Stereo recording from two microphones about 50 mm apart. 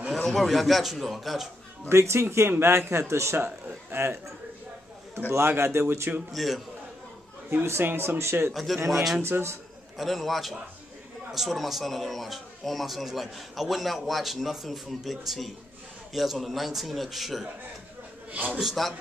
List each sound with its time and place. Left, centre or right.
0.1 s a man's voice: centre
1.9 s speech: right
2.5 s speech: right
3.3 s speech: right
5.3 s speech: right
6.3 s a man's voice: centre
7.8 s speech: right
8.8 s a man's voice: centre
9.2 s speech: right
9.9 s a man's voice: centre
18.3 s a man's voice: right
18.6 s a man's voice: centre